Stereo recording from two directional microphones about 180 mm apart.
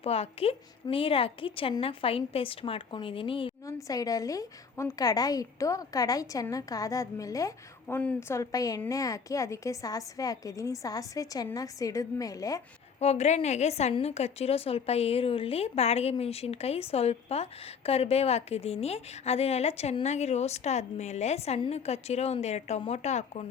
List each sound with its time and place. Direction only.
0.0 s a woman's voice: 35° left (ahead or behind)
3.7 s a woman's voice: 20° left (ahead or behind)
13.0 s a woman's voice: 35° left (ahead or behind)